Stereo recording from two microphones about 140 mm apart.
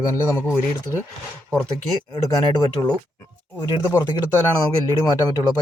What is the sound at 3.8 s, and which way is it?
Speech, 20° left (ahead or behind).